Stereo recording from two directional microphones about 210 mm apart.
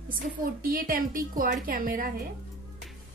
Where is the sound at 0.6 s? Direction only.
40° right (ahead or behind).